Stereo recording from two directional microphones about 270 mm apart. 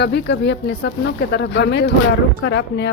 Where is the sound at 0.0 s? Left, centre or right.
Left.